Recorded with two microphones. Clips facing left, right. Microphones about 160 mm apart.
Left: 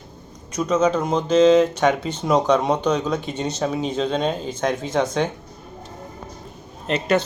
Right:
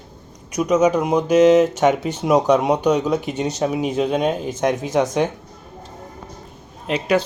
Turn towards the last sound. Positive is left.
turn(degrees=-10)  # may be behind; listen again after turning